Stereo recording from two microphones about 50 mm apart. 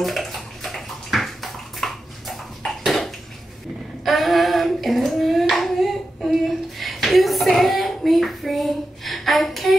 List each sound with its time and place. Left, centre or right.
0.0 s bathtub: centre
4.0 s child singing: centre